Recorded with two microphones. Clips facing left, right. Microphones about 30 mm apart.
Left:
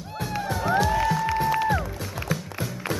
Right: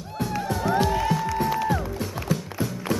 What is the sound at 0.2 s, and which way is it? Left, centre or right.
Music, centre.